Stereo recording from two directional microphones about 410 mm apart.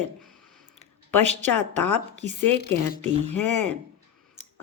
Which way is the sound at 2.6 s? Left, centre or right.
Left.